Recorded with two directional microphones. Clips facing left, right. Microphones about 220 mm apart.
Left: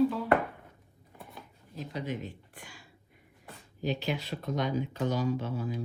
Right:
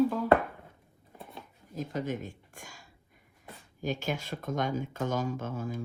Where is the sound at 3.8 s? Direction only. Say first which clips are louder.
Left 1 dB; 45° right (ahead or behind).